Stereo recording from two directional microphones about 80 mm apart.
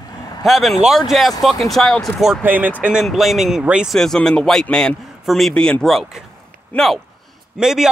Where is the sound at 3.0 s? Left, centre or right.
Centre.